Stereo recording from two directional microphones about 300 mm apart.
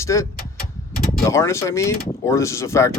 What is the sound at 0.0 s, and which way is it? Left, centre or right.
Speech, centre.